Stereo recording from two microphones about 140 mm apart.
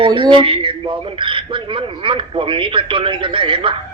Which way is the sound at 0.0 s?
35° right (ahead or behind).